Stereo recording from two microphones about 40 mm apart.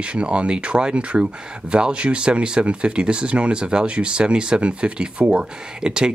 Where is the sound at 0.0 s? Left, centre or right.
Right.